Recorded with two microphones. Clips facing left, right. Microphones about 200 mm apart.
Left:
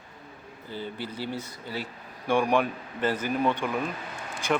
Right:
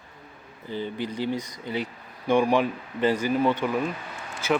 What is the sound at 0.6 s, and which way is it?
Speech, 15° right (ahead or behind).